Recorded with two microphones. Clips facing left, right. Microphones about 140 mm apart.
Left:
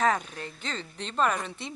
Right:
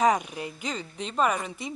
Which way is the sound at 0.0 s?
15° right (ahead or behind).